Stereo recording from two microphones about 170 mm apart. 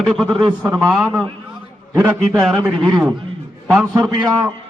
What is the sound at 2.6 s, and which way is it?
Speech, 25° right (ahead or behind).